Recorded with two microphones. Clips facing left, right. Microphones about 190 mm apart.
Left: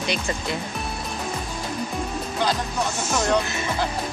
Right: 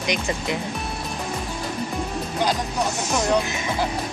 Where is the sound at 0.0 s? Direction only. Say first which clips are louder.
Right 1 dB; 15° right (ahead or behind).